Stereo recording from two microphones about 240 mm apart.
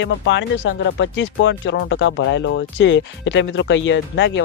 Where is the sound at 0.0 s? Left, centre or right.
Left.